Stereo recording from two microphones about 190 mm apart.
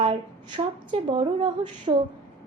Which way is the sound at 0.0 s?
25° right (ahead or behind).